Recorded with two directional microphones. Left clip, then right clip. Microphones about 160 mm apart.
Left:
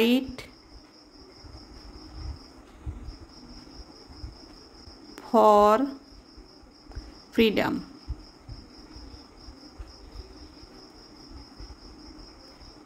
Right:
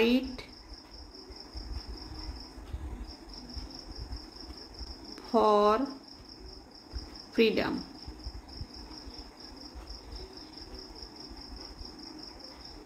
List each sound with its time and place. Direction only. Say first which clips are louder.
0.0 s speech: left 3 dB; 60° left (ahead or behind)
5.1 s speech: left 6 dB; 60° left (ahead or behind)
7.3 s speech: left 3 dB; 60° left (ahead or behind)